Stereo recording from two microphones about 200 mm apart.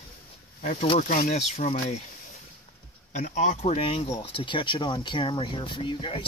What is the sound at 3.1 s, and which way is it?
Speech, 35° left (ahead or behind).